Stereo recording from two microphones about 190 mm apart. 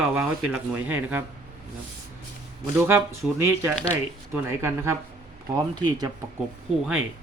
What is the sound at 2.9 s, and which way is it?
Speech, 10° right (ahead or behind).